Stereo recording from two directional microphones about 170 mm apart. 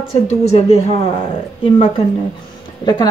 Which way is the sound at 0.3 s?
35° left (ahead or behind).